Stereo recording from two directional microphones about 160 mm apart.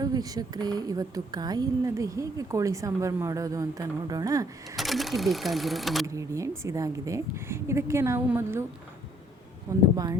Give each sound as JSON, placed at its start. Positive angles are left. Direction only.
{"t": 0.0, "sound": "speech", "side_deg": -25}
{"t": 4.8, "sound": "speech", "side_deg": 0}
{"t": 6.1, "sound": "a woman's voice", "side_deg": -20}
{"t": 9.7, "sound": "speech", "side_deg": -20}